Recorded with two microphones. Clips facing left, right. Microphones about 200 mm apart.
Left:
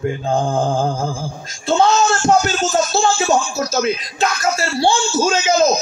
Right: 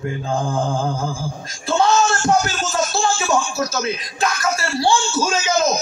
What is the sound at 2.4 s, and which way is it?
A man's voice, 25° left (ahead or behind).